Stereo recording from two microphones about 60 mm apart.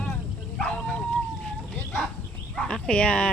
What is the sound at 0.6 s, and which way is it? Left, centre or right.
Dog, centre.